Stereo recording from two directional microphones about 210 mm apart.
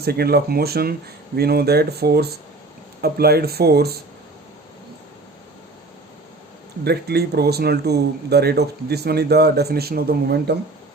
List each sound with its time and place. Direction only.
0.0 s speech: 50° right (ahead or behind)
6.8 s speech: 50° right (ahead or behind)